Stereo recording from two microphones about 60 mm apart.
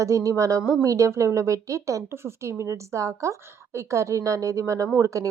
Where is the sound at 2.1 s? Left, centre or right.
Right.